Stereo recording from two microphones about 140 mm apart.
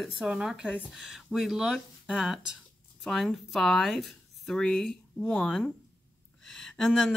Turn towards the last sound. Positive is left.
turn(degrees=5)  # may be behind; listen again after turning